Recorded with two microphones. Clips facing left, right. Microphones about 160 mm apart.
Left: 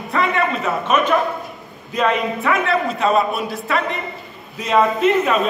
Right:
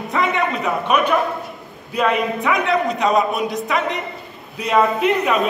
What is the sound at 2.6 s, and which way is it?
A man's voice, 20° right (ahead or behind).